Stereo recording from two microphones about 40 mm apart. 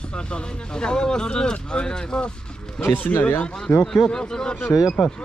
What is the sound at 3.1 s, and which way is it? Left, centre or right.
Speech, left.